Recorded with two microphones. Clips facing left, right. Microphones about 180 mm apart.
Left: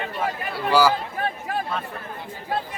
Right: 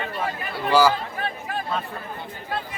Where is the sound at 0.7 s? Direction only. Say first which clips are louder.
Right 1 dB; 10° left (ahead or behind).